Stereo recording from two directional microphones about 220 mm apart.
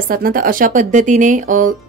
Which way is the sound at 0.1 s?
40° right (ahead or behind).